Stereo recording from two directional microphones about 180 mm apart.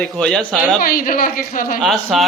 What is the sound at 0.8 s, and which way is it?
A woman's voice, 50° left (ahead or behind).